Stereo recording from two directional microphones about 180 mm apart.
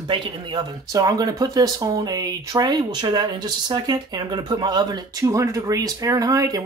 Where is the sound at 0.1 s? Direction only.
20° right (ahead or behind).